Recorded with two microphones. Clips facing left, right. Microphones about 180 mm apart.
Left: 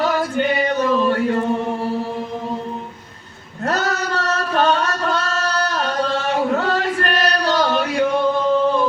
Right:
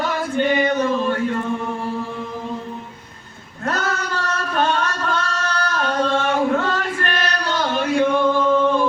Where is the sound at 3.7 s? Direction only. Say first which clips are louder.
Left 2 dB; 35° left (ahead or behind).